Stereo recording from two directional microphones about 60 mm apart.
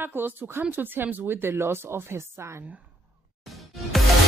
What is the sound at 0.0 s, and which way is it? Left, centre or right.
Speech, right.